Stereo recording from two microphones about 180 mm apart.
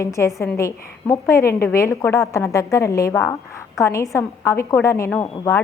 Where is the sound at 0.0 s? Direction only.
15° left (ahead or behind).